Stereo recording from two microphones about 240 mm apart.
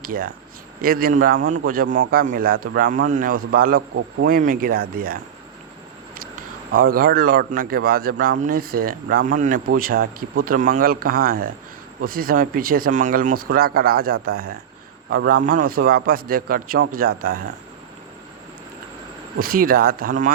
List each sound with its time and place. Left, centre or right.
0.0 s a man's voice: right
6.9 s a man's voice: right
19.4 s a man's voice: right